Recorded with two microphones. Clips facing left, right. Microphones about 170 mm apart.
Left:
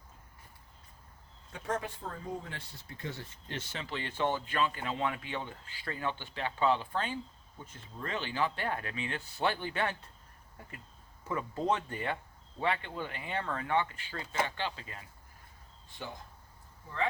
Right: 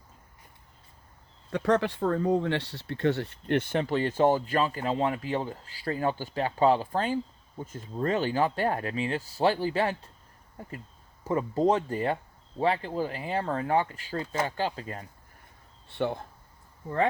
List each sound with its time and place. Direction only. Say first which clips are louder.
1.5 s speech: right 11 dB; 80° right; by 10.1 s 30° right (ahead or behind)
11.2 s speech: right 9 dB; 35° right (ahead or behind)
15.9 s speech: right 14 dB; 65° right (ahead or behind)